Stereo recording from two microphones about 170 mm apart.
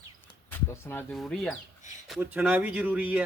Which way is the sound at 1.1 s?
Centre (ahead or behind).